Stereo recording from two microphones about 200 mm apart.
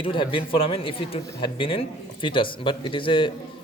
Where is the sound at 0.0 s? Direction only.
25° left (ahead or behind).